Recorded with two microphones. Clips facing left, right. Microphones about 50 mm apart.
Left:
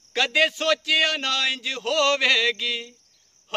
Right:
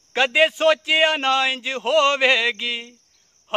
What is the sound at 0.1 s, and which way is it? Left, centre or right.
A man's voice, right.